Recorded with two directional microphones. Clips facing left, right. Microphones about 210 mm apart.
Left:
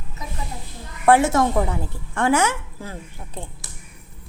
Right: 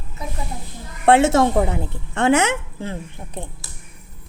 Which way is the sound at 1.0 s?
25° right (ahead or behind).